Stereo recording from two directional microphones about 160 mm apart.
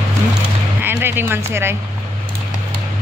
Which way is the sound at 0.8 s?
15° right (ahead or behind).